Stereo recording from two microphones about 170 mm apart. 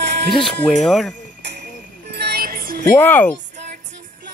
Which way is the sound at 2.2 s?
65° right (ahead or behind).